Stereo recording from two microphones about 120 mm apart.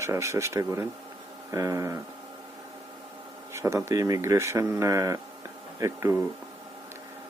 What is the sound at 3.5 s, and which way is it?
Speech, 25° right (ahead or behind).